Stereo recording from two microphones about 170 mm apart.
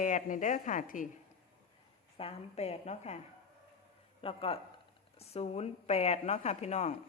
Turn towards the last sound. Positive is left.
turn(degrees=40)  # may be behind; listen again after turning